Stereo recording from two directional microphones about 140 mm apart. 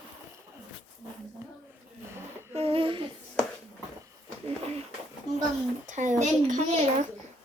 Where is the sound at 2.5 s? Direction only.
45° right (ahead or behind).